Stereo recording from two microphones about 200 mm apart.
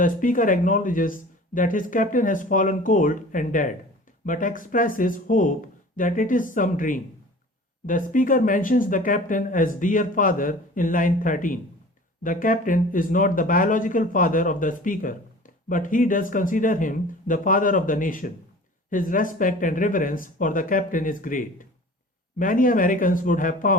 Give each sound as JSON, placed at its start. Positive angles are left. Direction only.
{"t": 0.0, "sound": "speech", "side_deg": 40}